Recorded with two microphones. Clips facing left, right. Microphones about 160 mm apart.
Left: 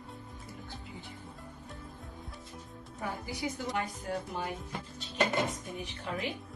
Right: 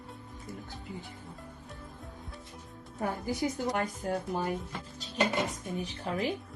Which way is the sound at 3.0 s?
45° right (ahead or behind).